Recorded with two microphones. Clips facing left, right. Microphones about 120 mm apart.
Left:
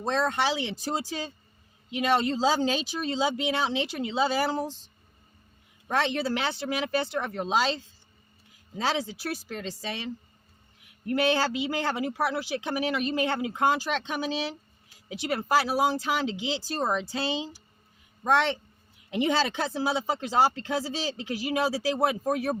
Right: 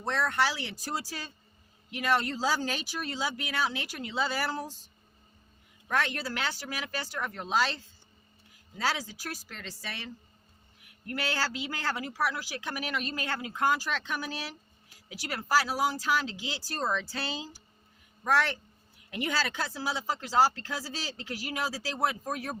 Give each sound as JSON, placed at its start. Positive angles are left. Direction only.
{"t": 0.0, "sound": "speech", "side_deg": 20}
{"t": 5.9, "sound": "speech", "side_deg": 25}
{"t": 11.0, "sound": "speech", "side_deg": 20}